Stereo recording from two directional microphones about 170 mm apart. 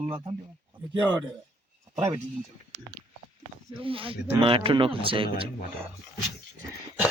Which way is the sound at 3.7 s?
30° right (ahead or behind).